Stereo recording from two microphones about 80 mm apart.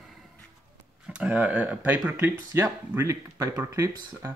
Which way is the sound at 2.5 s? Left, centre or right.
Right.